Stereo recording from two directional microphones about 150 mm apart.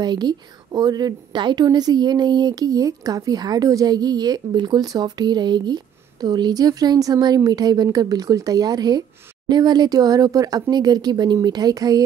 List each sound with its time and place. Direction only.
0.0 s a woman's voice: 30° right (ahead or behind)